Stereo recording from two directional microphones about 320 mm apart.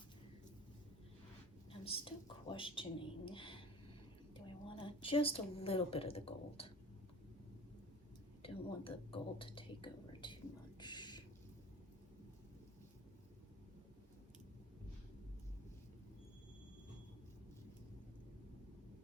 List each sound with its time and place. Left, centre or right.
1.7 s a woman's voice: centre
8.4 s speech: centre
10.8 s a sound: centre